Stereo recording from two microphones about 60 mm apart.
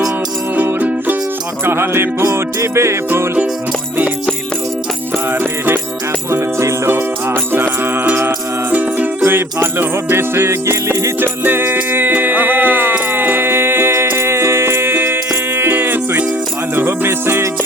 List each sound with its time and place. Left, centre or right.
0.5 s music: right
1.6 s music: right
5.3 s music: right
6.3 s music: right
6.9 s music: right
8.7 s music: right
9.2 s music: right
11.2 s music: right